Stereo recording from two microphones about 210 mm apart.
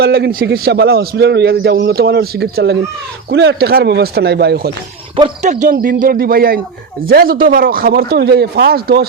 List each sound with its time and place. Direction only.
0.0 s a man's voice: 50° right (ahead or behind)
5.1 s a man's voice: 30° right (ahead or behind); by 9.0 s 50° right (ahead or behind)